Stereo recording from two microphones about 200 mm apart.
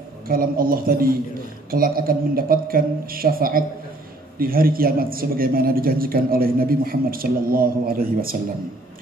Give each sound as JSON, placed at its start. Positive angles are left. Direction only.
{"t": 0.3, "sound": "a man's voice", "side_deg": -45}